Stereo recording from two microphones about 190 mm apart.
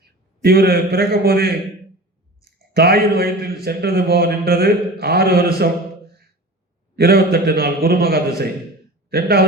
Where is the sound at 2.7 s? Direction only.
55° right (ahead or behind).